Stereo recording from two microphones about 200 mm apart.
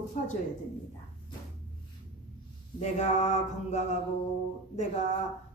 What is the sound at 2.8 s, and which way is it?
A woman's voice, 35° left (ahead or behind).